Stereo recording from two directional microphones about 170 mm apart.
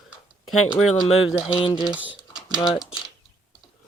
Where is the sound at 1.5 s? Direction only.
30° left (ahead or behind).